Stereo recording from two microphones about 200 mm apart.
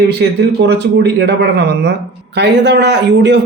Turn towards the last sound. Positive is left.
turn(degrees=-60)  # may be behind; listen again after turning